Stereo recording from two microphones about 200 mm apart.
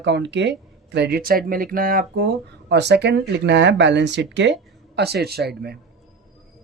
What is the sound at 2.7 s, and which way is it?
Speech, 60° right (ahead or behind).